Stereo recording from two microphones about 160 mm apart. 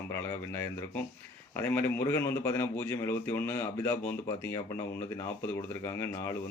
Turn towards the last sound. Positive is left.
turn(degrees=20)  # may be behind; listen again after turning